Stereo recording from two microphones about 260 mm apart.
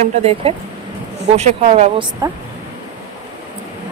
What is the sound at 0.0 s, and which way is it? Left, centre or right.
Speech, right.